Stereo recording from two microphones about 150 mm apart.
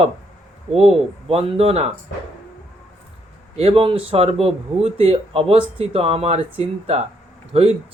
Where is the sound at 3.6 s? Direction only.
40° right (ahead or behind).